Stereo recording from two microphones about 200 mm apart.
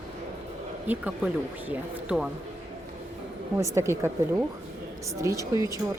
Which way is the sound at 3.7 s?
15° right (ahead or behind).